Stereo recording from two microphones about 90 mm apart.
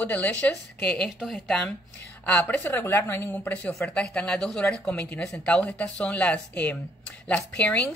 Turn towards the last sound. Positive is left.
turn(degrees=15)  # may be behind; listen again after turning